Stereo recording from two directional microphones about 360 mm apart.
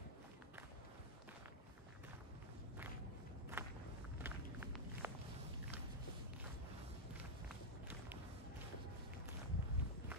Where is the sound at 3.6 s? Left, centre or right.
Centre.